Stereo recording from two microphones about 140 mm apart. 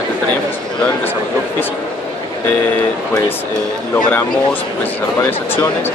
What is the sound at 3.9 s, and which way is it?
Speech, 15° left (ahead or behind).